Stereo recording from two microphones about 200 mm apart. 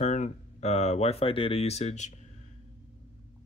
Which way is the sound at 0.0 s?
35° left (ahead or behind).